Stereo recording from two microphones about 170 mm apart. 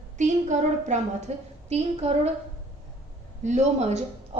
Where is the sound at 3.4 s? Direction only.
45° right (ahead or behind).